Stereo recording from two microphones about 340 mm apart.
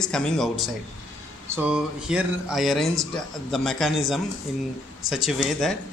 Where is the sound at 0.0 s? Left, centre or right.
Centre.